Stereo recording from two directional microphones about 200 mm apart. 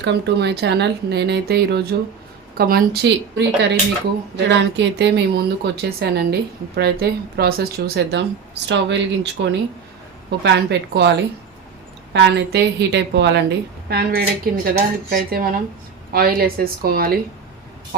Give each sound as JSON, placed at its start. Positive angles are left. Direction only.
{"t": 0.0, "sound": "speech", "side_deg": -60}
{"t": 12.1, "sound": "a woman's voice", "side_deg": -55}